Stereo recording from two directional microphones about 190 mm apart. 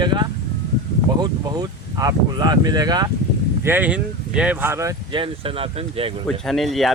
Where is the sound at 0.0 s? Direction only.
25° right (ahead or behind).